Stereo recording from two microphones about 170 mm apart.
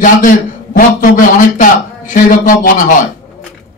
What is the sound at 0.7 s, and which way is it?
A man's voice, 50° left (ahead or behind).